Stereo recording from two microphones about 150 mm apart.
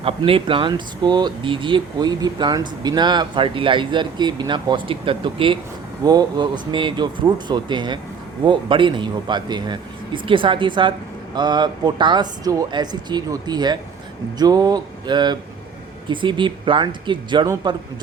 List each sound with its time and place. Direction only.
0.0 s speech: 35° right (ahead or behind)